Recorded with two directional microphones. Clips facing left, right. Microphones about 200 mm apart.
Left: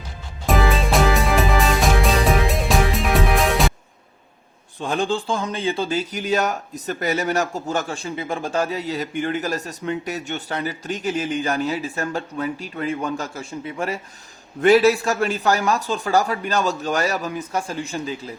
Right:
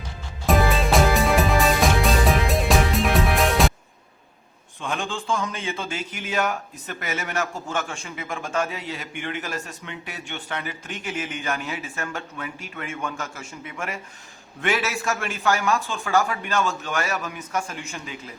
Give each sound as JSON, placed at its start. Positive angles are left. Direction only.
{"t": 0.4, "sound": "music", "side_deg": 0}
{"t": 4.8, "sound": "speech", "side_deg": 35}